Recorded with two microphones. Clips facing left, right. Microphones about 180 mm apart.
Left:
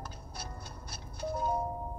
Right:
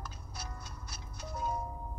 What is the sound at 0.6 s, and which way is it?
Music, 30° left (ahead or behind).